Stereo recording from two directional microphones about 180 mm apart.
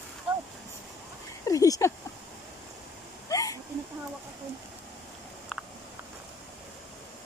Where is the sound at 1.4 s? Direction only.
20° left (ahead or behind).